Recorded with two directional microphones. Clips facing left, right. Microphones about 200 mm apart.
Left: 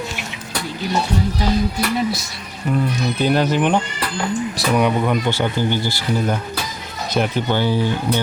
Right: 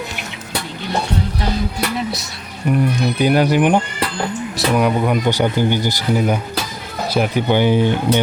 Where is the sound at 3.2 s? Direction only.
10° right (ahead or behind).